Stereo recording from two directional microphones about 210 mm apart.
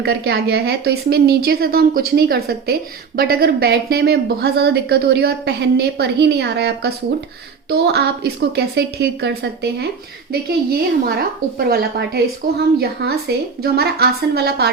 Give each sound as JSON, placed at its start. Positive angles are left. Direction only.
{"t": 0.0, "sound": "a woman's voice", "side_deg": -50}